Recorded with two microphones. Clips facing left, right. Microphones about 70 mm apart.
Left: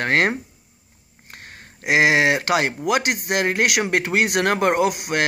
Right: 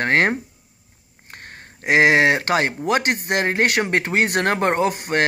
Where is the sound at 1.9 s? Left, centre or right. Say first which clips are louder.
Right 2 dB; right.